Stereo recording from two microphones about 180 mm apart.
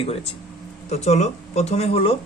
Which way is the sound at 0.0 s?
35° left (ahead or behind).